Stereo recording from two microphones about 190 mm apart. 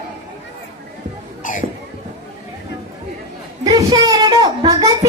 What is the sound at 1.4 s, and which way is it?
Cough, 45° left (ahead or behind).